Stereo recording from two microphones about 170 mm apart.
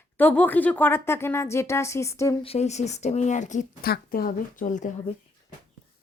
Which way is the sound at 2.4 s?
40° left (ahead or behind).